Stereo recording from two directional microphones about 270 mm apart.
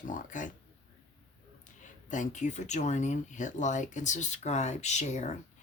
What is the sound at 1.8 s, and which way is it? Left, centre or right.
Speech, left.